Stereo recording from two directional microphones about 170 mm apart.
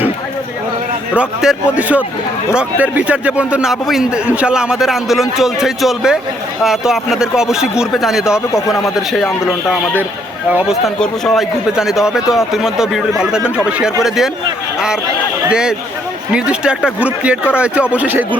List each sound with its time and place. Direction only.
1.1 s a man's voice: 5° right (ahead or behind)
8.5 s speech: 20° left (ahead or behind)
9.0 s a man's voice: centre (ahead or behind)
15.4 s a man's voice: 5° right (ahead or behind)